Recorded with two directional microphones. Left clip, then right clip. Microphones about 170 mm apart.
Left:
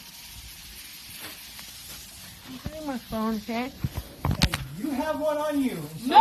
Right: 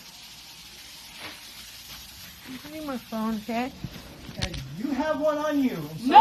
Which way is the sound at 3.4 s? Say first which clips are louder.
Right 2 dB; 25° right (ahead or behind).